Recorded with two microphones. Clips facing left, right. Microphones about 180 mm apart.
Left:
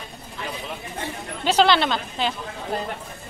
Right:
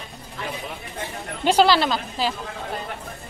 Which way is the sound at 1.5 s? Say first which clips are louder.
Right 1 dB; 5° right (ahead or behind).